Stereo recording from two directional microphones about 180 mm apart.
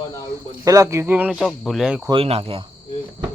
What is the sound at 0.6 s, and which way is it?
Speech, 15° right (ahead or behind).